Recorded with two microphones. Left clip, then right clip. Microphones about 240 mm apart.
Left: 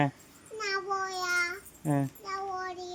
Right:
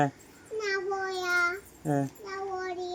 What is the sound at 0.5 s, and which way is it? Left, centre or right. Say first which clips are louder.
Child singing: right 1 dB; centre.